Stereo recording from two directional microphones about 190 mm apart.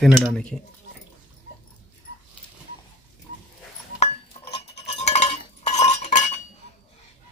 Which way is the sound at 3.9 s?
30° left (ahead or behind).